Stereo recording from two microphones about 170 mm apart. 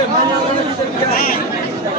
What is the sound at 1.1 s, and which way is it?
Speech, 60° left (ahead or behind).